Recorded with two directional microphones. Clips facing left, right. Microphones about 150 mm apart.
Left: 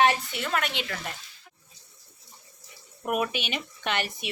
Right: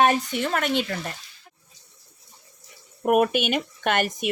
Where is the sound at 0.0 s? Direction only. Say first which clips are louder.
Right 3 dB; 45° right (ahead or behind).